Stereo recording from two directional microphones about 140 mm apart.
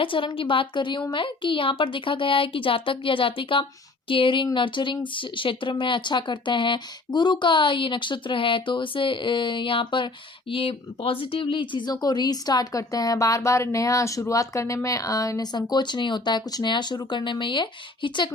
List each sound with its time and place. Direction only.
0.0 s speech: 35° left (ahead or behind)